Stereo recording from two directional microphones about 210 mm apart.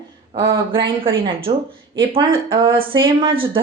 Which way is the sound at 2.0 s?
25° right (ahead or behind).